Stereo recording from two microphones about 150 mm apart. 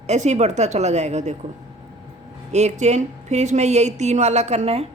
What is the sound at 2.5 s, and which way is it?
A woman's voice, 50° right (ahead or behind).